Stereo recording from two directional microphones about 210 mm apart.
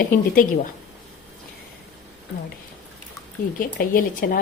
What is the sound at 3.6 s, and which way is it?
Speech, 40° left (ahead or behind).